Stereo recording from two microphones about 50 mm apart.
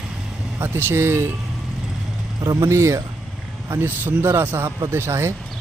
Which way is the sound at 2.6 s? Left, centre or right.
Right.